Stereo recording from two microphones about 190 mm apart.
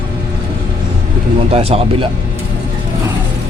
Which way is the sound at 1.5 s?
30° right (ahead or behind).